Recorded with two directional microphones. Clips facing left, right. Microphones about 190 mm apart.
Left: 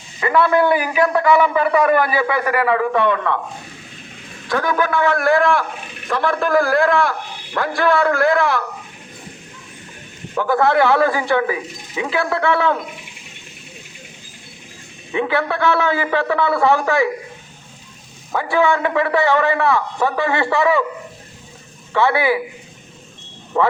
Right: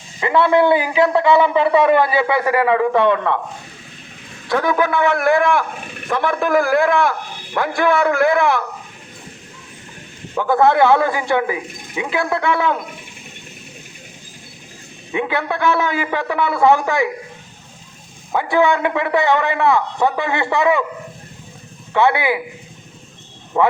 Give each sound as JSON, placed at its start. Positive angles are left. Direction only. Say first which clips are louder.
{"t": 0.2, "sound": "a man's voice", "louder": "right 1 dB", "side_deg": -20}
{"t": 4.4, "sound": "a man's voice", "louder": "right 2 dB", "side_deg": -20}
{"t": 10.3, "sound": "a man's voice", "louder": "right 1 dB", "side_deg": -20}
{"t": 15.1, "sound": "a man's voice", "louder": "left 1 dB", "side_deg": -20}
{"t": 18.3, "sound": "a man's voice", "louder": "right 1 dB", "side_deg": -20}
{"t": 21.9, "sound": "a man's voice", "louder": "even", "side_deg": -20}
{"t": 23.6, "sound": "a man's voice", "louder": "right 1 dB", "side_deg": -15}